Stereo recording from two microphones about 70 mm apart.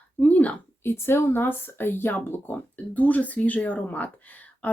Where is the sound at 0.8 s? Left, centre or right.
Left.